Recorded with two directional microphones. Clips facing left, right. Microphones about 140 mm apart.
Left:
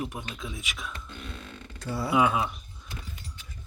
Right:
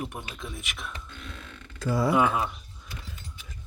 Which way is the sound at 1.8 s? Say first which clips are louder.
Right 7 dB; 90° right.